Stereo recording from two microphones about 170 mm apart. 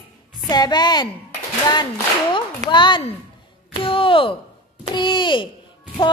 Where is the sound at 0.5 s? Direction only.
25° left (ahead or behind).